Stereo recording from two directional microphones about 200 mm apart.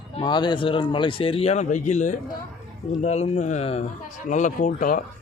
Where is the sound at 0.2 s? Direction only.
20° left (ahead or behind).